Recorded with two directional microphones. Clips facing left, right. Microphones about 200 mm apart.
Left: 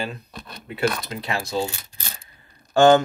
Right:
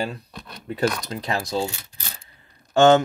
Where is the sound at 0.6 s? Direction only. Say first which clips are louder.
Right 1 dB; 40° right (ahead or behind).